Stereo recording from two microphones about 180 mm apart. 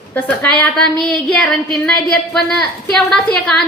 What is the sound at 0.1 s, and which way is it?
A woman's voice, 10° left (ahead or behind).